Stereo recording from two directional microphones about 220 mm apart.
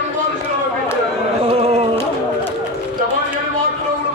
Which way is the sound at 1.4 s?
25° right (ahead or behind).